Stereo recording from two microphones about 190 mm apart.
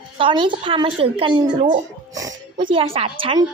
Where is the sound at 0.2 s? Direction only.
25° right (ahead or behind).